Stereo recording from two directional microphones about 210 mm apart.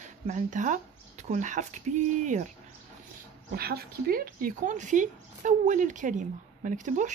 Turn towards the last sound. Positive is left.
turn(degrees=-35)  # may be behind; listen again after turning